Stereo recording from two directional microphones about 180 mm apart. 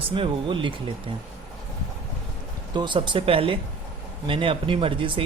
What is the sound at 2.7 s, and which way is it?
Speech, 25° right (ahead or behind).